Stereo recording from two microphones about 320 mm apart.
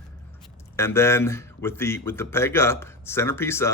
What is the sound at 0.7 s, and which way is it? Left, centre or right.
Speech, centre.